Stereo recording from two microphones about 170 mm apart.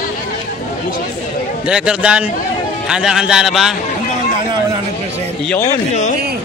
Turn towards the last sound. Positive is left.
turn(degrees=45)  # may be behind; listen again after turning